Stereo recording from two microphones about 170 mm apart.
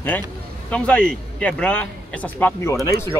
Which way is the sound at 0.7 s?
5° left (ahead or behind).